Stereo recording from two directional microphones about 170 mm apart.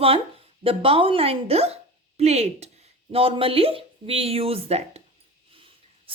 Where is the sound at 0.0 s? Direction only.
35° right (ahead or behind).